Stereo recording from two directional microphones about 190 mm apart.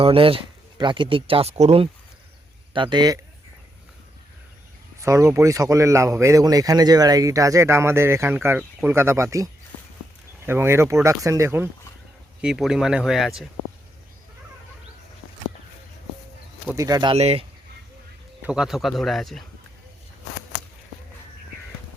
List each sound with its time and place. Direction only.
0.0 s speech: 30° right (ahead or behind)
4.9 s speech: 15° right (ahead or behind)
16.7 s speech: 20° right (ahead or behind)
17.2 s speech: 35° right (ahead or behind)
18.4 s speech: 5° right (ahead or behind)